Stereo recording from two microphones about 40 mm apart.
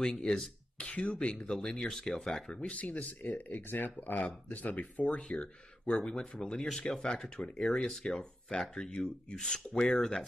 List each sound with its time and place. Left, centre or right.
0.0 s speech: centre
0.7 s speech: left
1.9 s speech: centre
2.2 s speech: centre
6.0 s speech: centre